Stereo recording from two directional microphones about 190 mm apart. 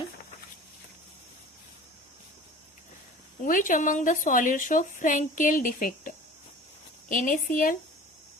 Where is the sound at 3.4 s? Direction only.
45° left (ahead or behind).